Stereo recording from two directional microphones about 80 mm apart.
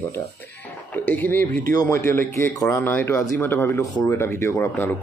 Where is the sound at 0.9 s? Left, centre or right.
Centre.